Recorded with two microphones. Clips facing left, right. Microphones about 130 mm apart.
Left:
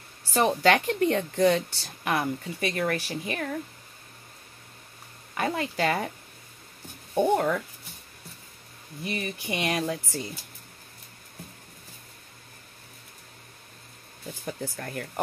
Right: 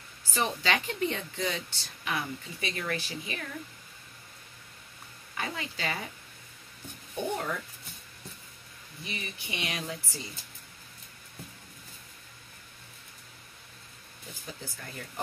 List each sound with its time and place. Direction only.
0.3 s speech: 45° left (ahead or behind)
5.3 s speech: 50° left (ahead or behind)
7.2 s speech: 55° left (ahead or behind)
9.0 s speech: 50° left (ahead or behind)
14.4 s speech: 55° left (ahead or behind)